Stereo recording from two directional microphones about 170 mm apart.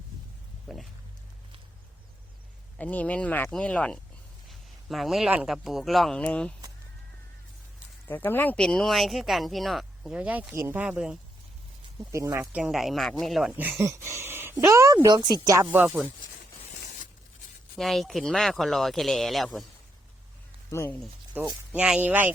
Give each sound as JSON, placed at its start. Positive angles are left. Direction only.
{"t": 0.7, "sound": "speech", "side_deg": 0}
{"t": 2.7, "sound": "speech", "side_deg": 10}
{"t": 8.0, "sound": "speech", "side_deg": 10}
{"t": 12.1, "sound": "speech", "side_deg": -20}
{"t": 12.4, "sound": "speech", "side_deg": -5}
{"t": 13.5, "sound": "speech", "side_deg": -10}
{"t": 15.4, "sound": "speech", "side_deg": -15}
{"t": 17.7, "sound": "speech", "side_deg": 0}
{"t": 20.7, "sound": "speech", "side_deg": 15}
{"t": 21.4, "sound": "speech", "side_deg": -10}